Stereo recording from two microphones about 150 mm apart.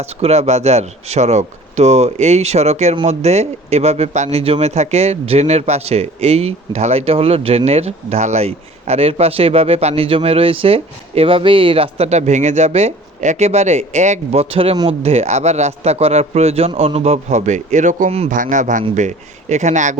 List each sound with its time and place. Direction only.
0.0 s a man's voice: 45° right (ahead or behind)